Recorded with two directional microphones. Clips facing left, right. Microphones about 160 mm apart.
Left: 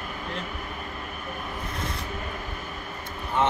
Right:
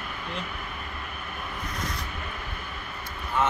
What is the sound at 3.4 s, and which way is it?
Speech, 25° left (ahead or behind).